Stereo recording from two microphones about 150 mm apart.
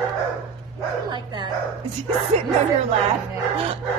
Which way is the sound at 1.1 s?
30° right (ahead or behind).